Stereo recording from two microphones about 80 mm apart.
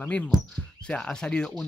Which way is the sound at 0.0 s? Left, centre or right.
Centre.